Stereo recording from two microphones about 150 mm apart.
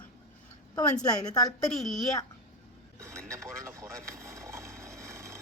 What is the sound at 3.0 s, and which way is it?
Radio, 20° right (ahead or behind).